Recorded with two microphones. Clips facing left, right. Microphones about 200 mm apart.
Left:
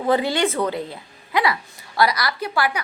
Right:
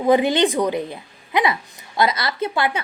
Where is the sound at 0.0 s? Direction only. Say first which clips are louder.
Right 4 dB; 15° right (ahead or behind).